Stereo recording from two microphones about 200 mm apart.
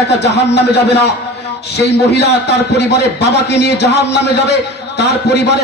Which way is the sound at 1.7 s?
55° left (ahead or behind).